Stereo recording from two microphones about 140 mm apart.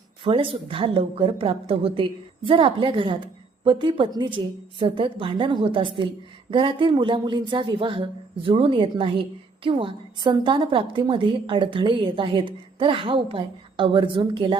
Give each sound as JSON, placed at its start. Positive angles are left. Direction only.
{"t": 0.3, "sound": "a woman's voice", "side_deg": -40}